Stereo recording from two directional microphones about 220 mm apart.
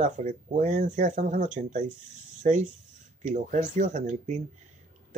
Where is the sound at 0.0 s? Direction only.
35° right (ahead or behind).